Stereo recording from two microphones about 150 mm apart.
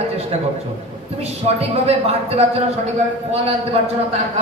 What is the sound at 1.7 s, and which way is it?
Speech, 45° right (ahead or behind).